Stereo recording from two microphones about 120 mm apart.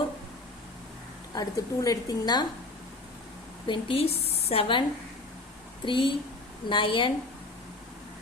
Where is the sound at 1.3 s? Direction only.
30° left (ahead or behind).